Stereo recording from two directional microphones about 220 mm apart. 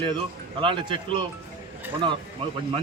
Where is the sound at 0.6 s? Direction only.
20° right (ahead or behind).